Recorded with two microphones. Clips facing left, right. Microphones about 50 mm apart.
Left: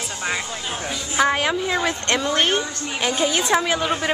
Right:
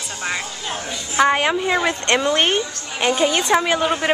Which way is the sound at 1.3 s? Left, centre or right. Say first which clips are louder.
Right 3 dB; centre.